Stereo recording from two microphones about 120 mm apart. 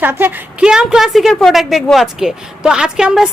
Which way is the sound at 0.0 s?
15° right (ahead or behind).